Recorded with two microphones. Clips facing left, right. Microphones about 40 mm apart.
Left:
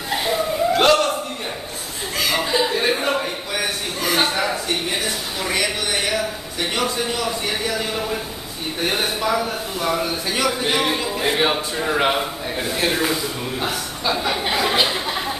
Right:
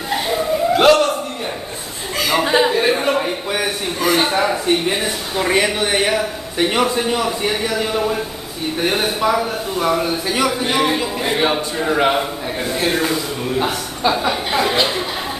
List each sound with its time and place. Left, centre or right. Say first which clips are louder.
0.1 s a sound: right 2 dB; centre
2.1 s chuckle: right 4 dB; centre
2.4 s chuckle: right 8 dB; right
2.7 s chuckle: right 4 dB; centre
4.6 s a sound: right 7 dB; right
5.4 s a man's voice: right 7 dB; right; by 14.8 s centre